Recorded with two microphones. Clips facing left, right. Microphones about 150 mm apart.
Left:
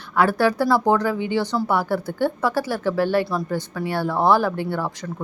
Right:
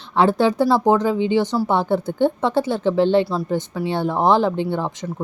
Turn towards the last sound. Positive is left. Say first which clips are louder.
# right 2 dB
turn(degrees=-20)  # may be behind; listen again after turning